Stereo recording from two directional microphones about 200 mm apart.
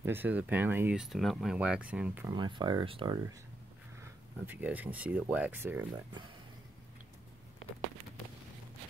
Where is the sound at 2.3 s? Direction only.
20° right (ahead or behind).